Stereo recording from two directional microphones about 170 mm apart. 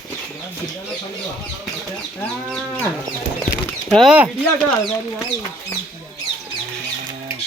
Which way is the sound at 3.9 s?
5° left (ahead or behind).